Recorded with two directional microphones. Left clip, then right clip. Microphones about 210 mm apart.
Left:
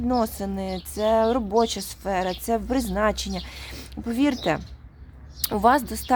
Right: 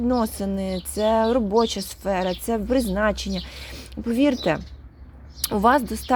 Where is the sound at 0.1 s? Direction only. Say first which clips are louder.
Left 3 dB; 10° right (ahead or behind).